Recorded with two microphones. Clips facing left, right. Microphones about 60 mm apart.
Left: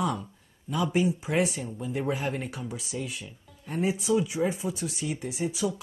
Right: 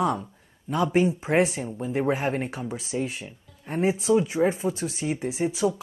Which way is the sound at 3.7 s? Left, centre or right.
Right.